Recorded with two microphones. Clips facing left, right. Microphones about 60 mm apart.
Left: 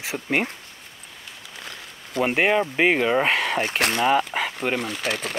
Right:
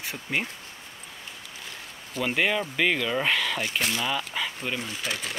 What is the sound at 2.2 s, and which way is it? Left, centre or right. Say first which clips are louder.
Speech: left 5 dB; left.